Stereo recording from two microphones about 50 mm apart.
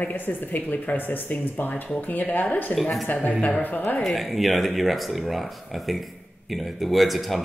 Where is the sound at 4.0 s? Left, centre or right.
Centre.